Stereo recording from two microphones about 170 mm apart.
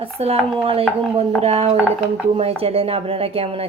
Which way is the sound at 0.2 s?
35° right (ahead or behind).